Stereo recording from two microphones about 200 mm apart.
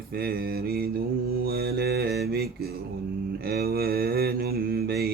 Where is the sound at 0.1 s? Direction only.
50° right (ahead or behind).